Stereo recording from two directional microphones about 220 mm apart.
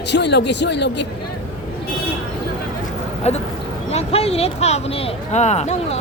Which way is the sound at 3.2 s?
30° left (ahead or behind).